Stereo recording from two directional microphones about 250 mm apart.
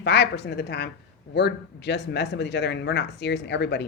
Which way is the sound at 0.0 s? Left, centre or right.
Left.